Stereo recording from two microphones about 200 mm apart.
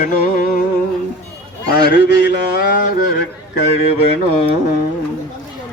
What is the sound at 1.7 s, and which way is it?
Speech, 55° left (ahead or behind).